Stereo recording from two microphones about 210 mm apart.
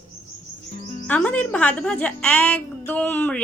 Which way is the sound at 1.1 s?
5° left (ahead or behind).